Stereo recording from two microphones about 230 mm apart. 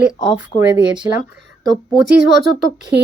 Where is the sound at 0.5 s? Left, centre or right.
Left.